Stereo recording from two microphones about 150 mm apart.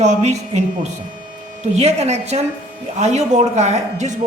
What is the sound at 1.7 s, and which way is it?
Speech, 45° right (ahead or behind).